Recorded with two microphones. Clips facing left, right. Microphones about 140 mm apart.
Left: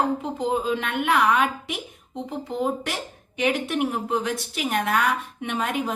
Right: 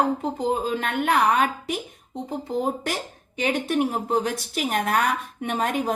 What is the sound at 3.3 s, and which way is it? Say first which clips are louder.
A woman's voice: right 1 dB; 40° right (ahead or behind).